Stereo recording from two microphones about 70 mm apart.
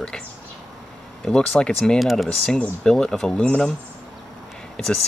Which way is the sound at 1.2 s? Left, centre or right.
Centre.